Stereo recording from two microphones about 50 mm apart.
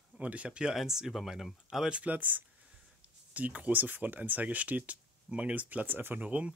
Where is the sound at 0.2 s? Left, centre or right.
Right.